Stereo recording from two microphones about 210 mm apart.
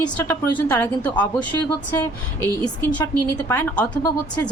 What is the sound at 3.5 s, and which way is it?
Speech, 10° left (ahead or behind).